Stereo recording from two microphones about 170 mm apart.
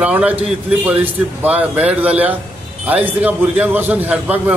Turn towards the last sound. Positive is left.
turn(degrees=-10)  # may be behind; listen again after turning